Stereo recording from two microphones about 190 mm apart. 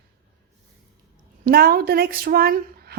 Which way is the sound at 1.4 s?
55° right (ahead or behind).